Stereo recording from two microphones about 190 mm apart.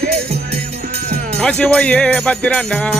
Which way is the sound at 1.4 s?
5° left (ahead or behind).